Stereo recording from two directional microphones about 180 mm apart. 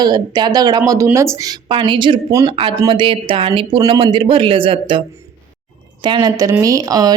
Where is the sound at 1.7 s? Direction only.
25° right (ahead or behind).